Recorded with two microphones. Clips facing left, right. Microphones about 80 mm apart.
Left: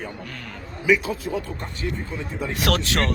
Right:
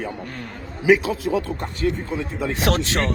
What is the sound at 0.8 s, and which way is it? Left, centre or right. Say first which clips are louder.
Speech: right 4 dB; right.